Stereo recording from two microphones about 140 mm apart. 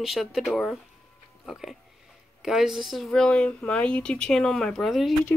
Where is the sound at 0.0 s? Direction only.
5° right (ahead or behind).